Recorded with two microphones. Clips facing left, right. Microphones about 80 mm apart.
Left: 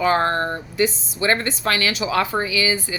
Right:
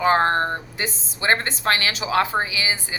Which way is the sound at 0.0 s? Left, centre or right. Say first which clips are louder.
Right 1 dB; right.